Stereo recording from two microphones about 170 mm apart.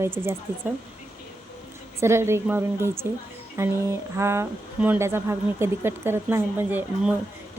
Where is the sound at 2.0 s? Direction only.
15° right (ahead or behind).